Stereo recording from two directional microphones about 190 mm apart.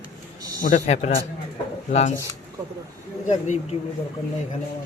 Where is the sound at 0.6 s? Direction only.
40° left (ahead or behind).